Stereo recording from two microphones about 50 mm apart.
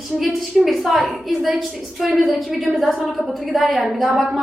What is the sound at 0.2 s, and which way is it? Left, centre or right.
A woman's voice, centre.